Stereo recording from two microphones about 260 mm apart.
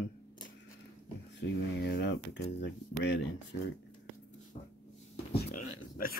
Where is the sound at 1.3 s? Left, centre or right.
Left.